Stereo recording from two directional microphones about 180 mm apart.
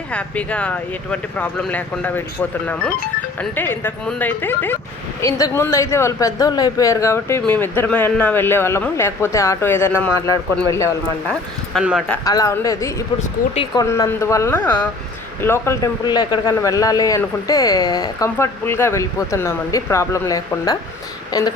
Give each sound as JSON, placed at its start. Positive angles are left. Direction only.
{"t": 0.1, "sound": "a man's voice", "side_deg": 5}
{"t": 11.8, "sound": "speech", "side_deg": -5}
{"t": 12.2, "sound": "a man's voice", "side_deg": 20}
{"t": 13.9, "sound": "a man's voice", "side_deg": 15}